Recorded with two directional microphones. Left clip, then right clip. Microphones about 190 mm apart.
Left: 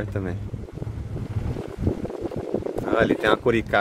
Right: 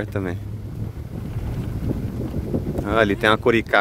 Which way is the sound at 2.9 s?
15° right (ahead or behind).